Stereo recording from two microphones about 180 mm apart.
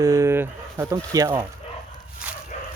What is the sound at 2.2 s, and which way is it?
Bow-wow, 5° right (ahead or behind).